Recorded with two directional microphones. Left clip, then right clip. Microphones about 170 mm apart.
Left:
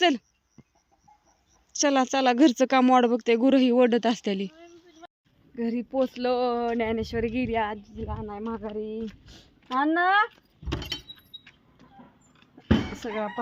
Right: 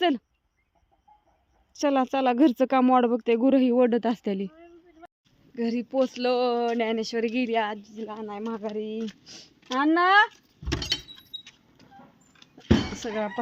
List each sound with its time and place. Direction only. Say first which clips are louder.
0.0 s speech: left 2 dB; 5° right (ahead or behind)
1.7 s speech: left 1 dB; centre (ahead or behind)
10.8 s keys jangling: right 6 dB; 20° right (ahead or behind)
11.2 s keys jangling: right 5 dB; centre (ahead or behind)
12.9 s speech: right 1 dB; centre (ahead or behind)